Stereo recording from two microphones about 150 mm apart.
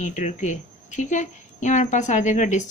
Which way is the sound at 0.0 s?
50° left (ahead or behind).